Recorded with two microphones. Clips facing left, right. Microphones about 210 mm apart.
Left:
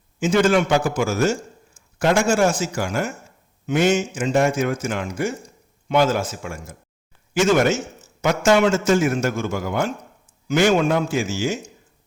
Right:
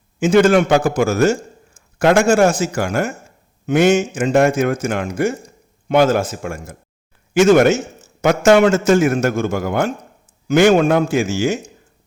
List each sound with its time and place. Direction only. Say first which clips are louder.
0.2 s a man's voice: right 5 dB; 60° right (ahead or behind)